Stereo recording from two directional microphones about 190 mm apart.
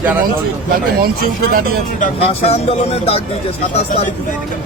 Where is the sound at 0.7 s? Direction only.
50° right (ahead or behind).